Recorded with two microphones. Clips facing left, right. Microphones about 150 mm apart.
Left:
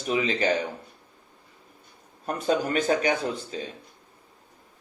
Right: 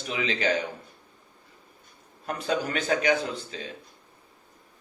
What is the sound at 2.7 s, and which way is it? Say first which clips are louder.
Speech: left 1 dB; 45° left (ahead or behind).